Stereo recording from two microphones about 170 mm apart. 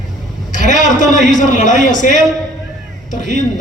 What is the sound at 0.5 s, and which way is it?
A man's voice, 50° left (ahead or behind).